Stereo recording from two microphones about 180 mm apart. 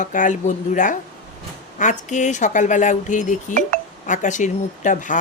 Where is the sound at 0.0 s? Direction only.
45° left (ahead or behind).